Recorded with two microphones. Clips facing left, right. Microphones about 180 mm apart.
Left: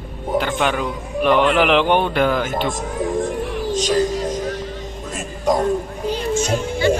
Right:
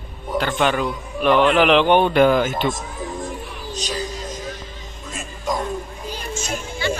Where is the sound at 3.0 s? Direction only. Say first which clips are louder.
Left 10 dB; 90° left.